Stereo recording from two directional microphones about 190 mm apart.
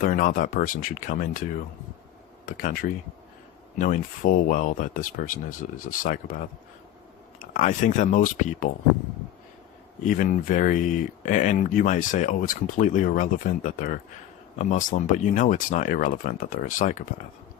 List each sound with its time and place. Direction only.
0.0 s speech: 45° left (ahead or behind)
2.5 s speech: 45° left (ahead or behind)
7.5 s speech: 40° left (ahead or behind)
10.0 s speech: 45° left (ahead or behind)